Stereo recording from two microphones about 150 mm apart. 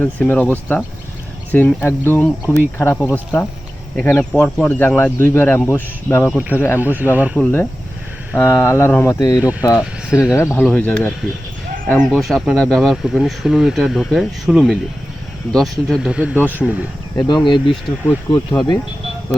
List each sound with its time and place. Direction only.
0.0 s speech: 10° left (ahead or behind)
6.8 s speech: 10° right (ahead or behind)
7.3 s speech: 15° left (ahead or behind)
9.4 s speech: 10° right (ahead or behind)
10.3 s speech: 15° left (ahead or behind); by 16.3 s 5° right (ahead or behind)
16.6 s speech: 5° left (ahead or behind)
17.2 s speech: 30° left (ahead or behind)